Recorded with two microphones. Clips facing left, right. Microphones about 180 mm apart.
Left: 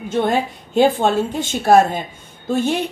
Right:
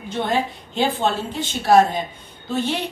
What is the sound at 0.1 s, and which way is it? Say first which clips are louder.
A woman's voice: left 4 dB; 45° left (ahead or behind).